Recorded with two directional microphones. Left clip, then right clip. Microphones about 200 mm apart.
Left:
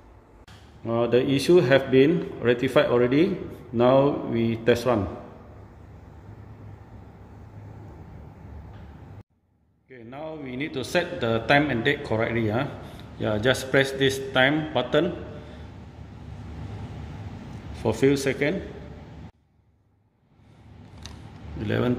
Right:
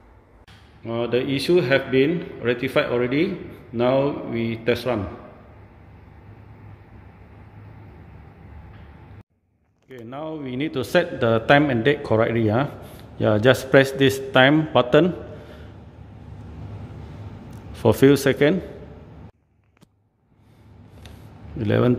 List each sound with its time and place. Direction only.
0.8 s speech: 5° left (ahead or behind)
9.8 s a man's voice: 45° right (ahead or behind)
17.7 s a man's voice: 55° right (ahead or behind)
21.5 s a man's voice: 50° right (ahead or behind)